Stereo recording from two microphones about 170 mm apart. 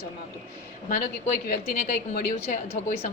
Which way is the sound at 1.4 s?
55° left (ahead or behind).